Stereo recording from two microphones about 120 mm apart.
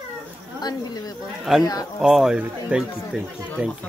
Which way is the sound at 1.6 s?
30° left (ahead or behind).